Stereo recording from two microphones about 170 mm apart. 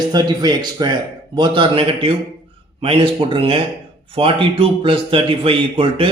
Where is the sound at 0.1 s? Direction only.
25° right (ahead or behind).